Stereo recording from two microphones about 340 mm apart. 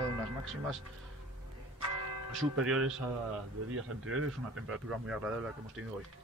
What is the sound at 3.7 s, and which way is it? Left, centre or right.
Speech, right.